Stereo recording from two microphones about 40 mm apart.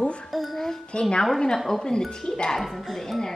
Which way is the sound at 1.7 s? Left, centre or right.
Centre.